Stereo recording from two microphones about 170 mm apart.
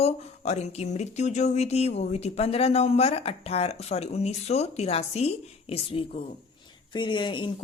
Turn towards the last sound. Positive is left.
turn(degrees=30)  # may be behind; listen again after turning